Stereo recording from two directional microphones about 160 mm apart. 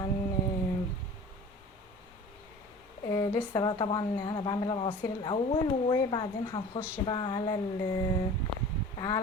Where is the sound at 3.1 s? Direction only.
25° left (ahead or behind).